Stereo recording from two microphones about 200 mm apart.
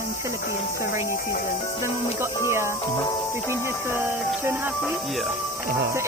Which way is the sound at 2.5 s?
15° right (ahead or behind).